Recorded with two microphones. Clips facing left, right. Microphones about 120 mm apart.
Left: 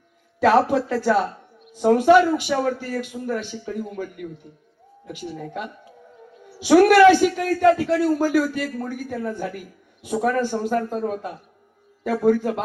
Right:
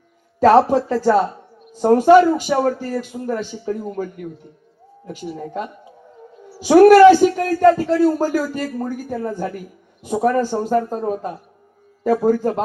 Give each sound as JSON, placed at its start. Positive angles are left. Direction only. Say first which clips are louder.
{"t": 0.3, "sound": "speech", "louder": "right 5 dB", "side_deg": -35}
{"t": 1.6, "sound": "a sound", "louder": "right 2 dB", "side_deg": -40}
{"t": 1.9, "sound": "a woman's voice", "louder": "right 4 dB", "side_deg": -40}